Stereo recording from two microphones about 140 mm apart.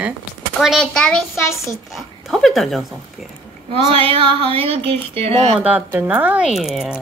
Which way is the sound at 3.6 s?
40° right (ahead or behind).